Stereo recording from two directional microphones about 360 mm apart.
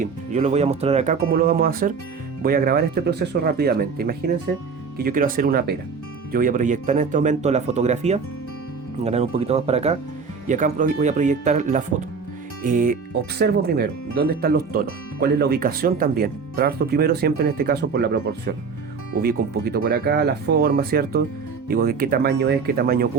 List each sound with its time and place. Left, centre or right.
0.0 s speech: centre